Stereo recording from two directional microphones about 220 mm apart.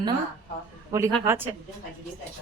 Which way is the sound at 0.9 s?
10° right (ahead or behind).